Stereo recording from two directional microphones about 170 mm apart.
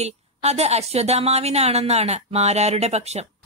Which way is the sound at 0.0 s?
40° right (ahead or behind).